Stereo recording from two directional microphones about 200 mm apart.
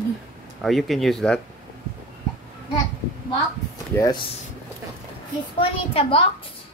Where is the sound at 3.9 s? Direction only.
15° left (ahead or behind).